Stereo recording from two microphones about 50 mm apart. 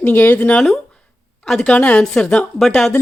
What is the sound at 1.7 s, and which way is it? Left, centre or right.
Speech, left.